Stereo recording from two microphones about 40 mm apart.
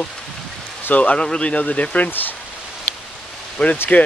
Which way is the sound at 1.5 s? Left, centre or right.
Left.